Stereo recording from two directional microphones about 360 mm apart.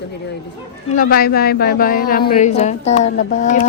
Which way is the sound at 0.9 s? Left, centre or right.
Left.